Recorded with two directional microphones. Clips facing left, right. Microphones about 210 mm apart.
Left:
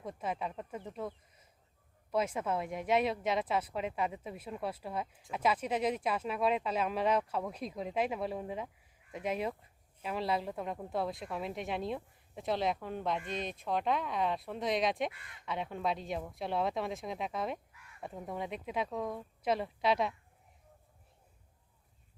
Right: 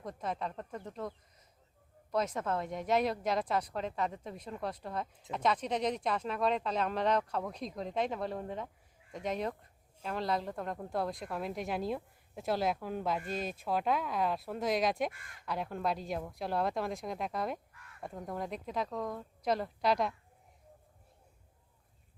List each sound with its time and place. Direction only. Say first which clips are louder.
0.0 s a woman's voice: even; 5° left (ahead or behind)
2.1 s a woman's voice: even; 5° left (ahead or behind)
15.1 s speech: even; 45° right (ahead or behind)
15.4 s a woman's voice: right 1 dB; centre (ahead or behind)